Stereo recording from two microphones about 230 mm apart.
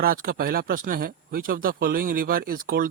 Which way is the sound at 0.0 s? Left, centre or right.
Right.